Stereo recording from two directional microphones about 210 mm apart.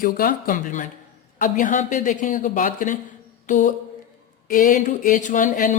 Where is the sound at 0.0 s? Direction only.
45° left (ahead or behind).